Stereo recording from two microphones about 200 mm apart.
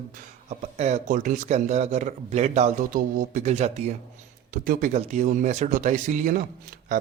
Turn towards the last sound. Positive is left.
turn(degrees=-40)  # may be behind; listen again after turning